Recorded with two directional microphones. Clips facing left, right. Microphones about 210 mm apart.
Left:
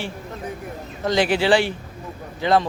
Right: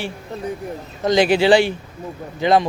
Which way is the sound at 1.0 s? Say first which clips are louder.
Right 4 dB; 15° right (ahead or behind).